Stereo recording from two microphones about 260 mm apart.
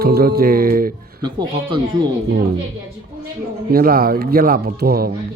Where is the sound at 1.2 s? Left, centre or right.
Centre.